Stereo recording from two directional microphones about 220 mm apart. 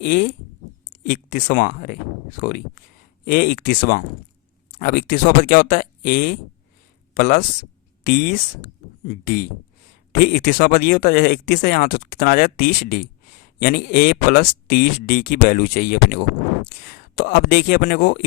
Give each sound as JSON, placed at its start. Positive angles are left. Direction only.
{"t": 0.0, "sound": "speech", "side_deg": 35}